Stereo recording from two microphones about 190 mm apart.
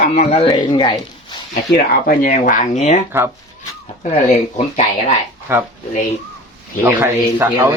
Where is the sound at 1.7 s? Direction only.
50° left (ahead or behind).